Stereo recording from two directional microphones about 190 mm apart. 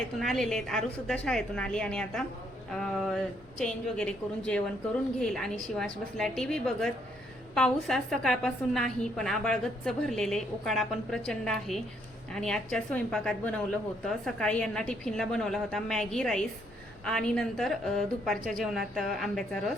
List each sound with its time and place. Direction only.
0.2 s a woman's voice: centre (ahead or behind)
18.3 s a woman's voice: 45° right (ahead or behind)
18.6 s a woman's voice: centre (ahead or behind)